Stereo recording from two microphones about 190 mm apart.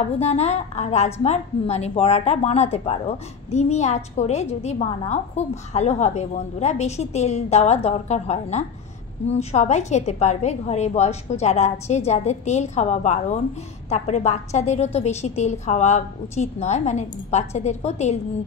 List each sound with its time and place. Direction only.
0.2 s a woman's voice: 35° left (ahead or behind)